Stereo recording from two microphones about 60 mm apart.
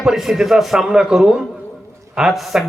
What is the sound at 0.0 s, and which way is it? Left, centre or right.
A man's voice, centre.